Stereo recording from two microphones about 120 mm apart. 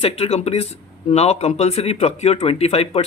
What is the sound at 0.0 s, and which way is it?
Speech, 60° left (ahead or behind).